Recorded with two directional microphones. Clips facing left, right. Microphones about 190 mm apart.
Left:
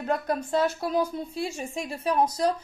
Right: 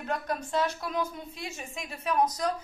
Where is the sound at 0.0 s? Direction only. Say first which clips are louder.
Left 5 dB; 35° left (ahead or behind).